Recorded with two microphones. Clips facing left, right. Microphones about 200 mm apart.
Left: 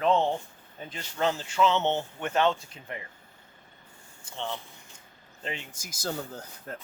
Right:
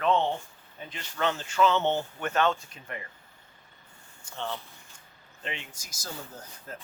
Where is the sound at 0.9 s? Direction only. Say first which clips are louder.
Left 2 dB; 30° left (ahead or behind).